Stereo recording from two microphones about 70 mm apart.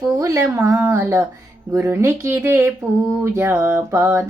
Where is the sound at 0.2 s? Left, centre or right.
Right.